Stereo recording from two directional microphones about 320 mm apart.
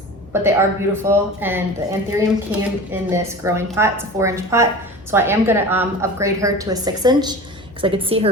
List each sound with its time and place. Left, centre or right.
0.4 s speech: centre